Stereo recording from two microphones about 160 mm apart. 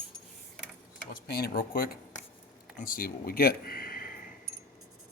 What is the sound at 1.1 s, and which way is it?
Speech, 70° left (ahead or behind).